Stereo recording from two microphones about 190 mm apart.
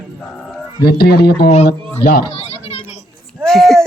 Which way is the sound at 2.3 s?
35° left (ahead or behind).